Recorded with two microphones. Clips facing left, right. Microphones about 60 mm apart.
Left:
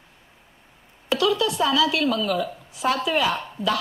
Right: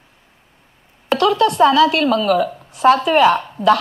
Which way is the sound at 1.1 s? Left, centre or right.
Right.